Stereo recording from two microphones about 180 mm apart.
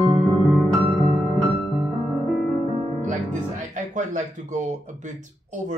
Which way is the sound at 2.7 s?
35° right (ahead or behind).